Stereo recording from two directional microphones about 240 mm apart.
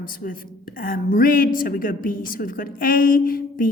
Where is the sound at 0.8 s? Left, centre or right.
Left.